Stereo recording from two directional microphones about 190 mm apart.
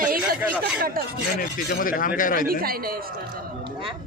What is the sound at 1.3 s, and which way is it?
Speech, 50° left (ahead or behind).